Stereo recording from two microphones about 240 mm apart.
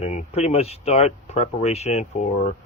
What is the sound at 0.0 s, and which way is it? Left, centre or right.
Speech, left.